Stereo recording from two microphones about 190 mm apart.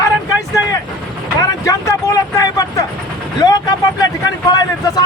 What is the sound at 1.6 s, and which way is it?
Vehicle, 15° left (ahead or behind).